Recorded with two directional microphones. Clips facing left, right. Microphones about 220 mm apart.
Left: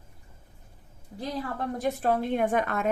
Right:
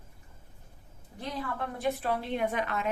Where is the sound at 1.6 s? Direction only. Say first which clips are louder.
Left 2 dB; 40° left (ahead or behind).